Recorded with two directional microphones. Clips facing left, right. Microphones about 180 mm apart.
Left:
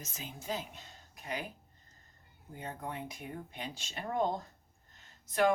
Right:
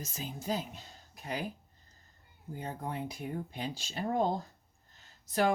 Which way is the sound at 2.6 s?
35° right (ahead or behind).